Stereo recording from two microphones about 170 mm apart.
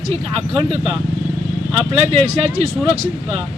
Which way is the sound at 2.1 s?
40° right (ahead or behind).